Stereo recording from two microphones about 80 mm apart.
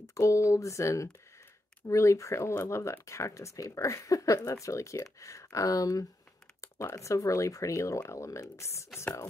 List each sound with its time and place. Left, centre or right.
0.1 s speech: left